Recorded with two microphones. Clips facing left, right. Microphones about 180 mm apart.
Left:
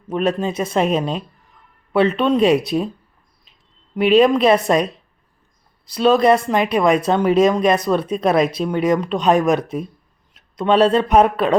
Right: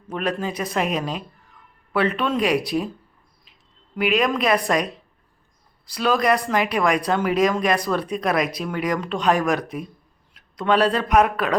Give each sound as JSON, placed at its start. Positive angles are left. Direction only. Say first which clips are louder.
{"t": 0.1, "sound": "speech", "louder": "left 6 dB", "side_deg": 20}
{"t": 3.9, "sound": "speech", "louder": "left 8 dB", "side_deg": 25}